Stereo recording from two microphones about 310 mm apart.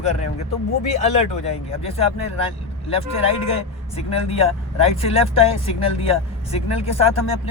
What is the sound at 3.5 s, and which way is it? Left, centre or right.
Speech, centre.